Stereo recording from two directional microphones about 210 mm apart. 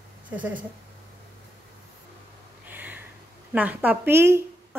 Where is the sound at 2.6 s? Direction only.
10° right (ahead or behind).